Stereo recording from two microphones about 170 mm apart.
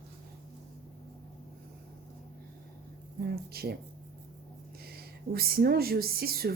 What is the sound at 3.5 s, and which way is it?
Speech, 65° right (ahead or behind).